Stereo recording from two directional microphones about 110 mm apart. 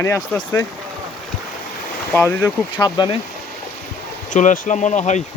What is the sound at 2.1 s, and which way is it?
Speech, 15° left (ahead or behind).